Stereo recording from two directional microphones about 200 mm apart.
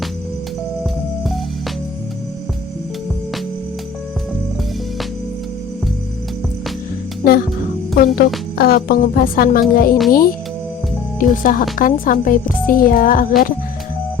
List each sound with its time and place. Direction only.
7.2 s music: 50° left (ahead or behind)
8.5 s speech: 50° left (ahead or behind)